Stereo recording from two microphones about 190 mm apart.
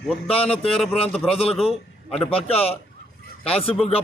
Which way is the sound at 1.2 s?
30° left (ahead or behind).